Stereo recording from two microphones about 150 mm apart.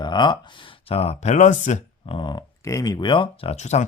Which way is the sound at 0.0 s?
30° left (ahead or behind).